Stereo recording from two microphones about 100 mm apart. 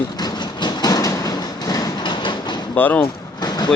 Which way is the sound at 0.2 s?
45° left (ahead or behind).